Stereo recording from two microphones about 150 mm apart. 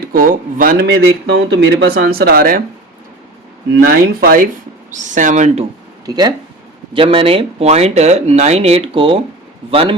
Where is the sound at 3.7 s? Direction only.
90° right.